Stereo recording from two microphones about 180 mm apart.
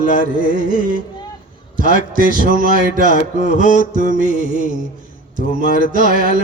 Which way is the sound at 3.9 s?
45° right (ahead or behind).